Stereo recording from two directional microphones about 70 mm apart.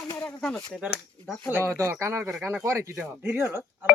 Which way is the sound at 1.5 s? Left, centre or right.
Right.